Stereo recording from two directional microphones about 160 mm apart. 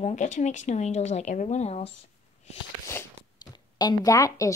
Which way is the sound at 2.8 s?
20° left (ahead or behind).